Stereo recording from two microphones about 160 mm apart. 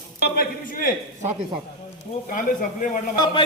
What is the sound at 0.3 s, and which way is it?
Speech, 65° left (ahead or behind).